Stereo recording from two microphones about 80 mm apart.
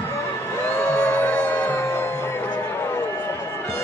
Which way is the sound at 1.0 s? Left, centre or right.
Centre.